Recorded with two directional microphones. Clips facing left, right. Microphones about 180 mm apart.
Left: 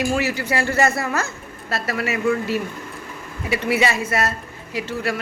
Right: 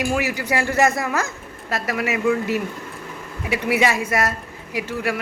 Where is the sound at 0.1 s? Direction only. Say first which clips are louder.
Even; 15° right (ahead or behind).